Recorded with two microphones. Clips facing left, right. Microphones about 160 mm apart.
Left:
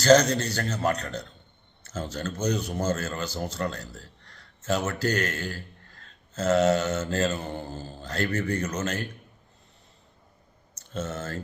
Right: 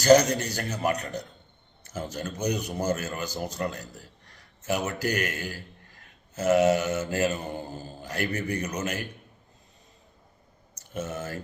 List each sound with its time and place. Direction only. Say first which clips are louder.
0.0 s a man's voice: even; 10° right (ahead or behind)
10.8 s speech: even; 15° right (ahead or behind)